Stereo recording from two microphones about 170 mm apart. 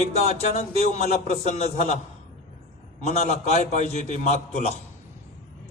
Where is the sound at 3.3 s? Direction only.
40° left (ahead or behind).